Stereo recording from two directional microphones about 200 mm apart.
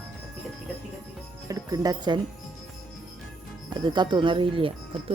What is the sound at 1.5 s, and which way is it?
Speech, 15° right (ahead or behind).